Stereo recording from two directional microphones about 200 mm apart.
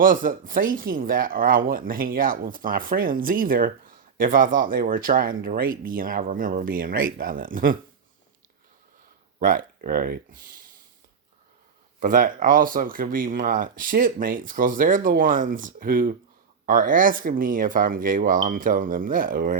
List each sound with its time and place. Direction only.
0.0 s speech: 45° right (ahead or behind)
9.4 s speech: 45° right (ahead or behind)
11.9 s speech: 40° right (ahead or behind)